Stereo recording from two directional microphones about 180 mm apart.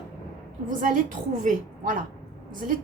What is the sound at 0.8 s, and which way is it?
A woman's voice, 45° right (ahead or behind).